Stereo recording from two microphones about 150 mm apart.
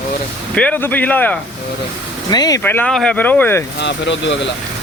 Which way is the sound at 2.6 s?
15° left (ahead or behind).